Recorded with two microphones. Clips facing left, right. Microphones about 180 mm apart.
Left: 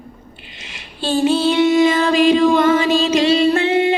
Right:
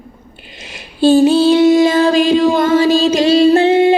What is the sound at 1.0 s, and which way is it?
Female singing, 35° right (ahead or behind).